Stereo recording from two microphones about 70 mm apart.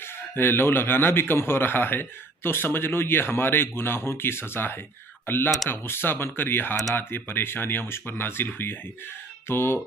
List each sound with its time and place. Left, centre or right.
0.0 s a man's voice: left